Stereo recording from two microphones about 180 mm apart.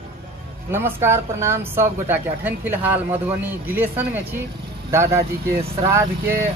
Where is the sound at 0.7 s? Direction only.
15° right (ahead or behind).